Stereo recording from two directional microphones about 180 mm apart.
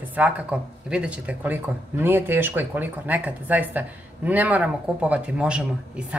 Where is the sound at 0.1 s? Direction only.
5° right (ahead or behind).